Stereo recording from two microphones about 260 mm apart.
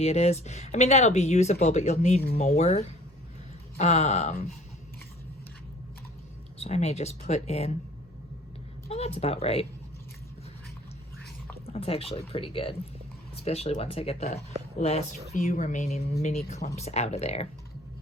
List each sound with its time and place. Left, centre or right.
0.0 s speech: left
6.6 s speech: left
8.9 s speech: left
11.6 s speech: left